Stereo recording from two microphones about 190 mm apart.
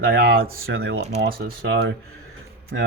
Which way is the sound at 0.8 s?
75° right (ahead or behind).